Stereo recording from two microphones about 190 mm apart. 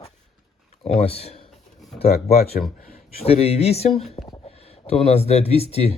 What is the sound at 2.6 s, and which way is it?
Speech, 45° left (ahead or behind).